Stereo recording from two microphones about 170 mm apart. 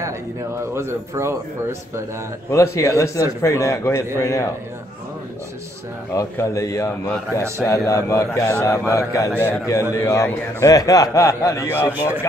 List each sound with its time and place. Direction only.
0.6 s speech: 15° right (ahead or behind)
2.5 s a man's voice: 15° left (ahead or behind)
6.1 s a man's voice: 20° left (ahead or behind)